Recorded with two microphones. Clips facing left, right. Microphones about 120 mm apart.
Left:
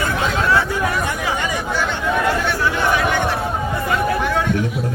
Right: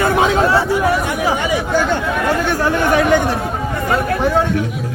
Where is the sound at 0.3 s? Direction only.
30° right (ahead or behind).